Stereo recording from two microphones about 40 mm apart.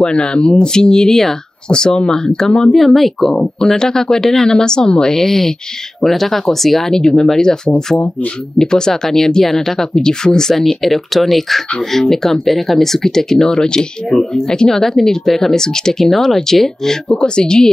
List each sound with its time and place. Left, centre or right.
0.0 s speech: left
2.8 s speech: centre
4.5 s speech: centre
7.0 s speech: centre
10.5 s speech: centre
17.1 s speech: left